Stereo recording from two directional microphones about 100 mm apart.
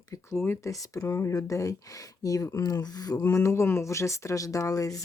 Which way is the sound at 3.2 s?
30° left (ahead or behind).